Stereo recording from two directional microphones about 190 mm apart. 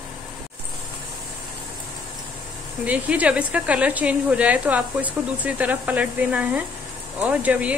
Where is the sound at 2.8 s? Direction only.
5° right (ahead or behind).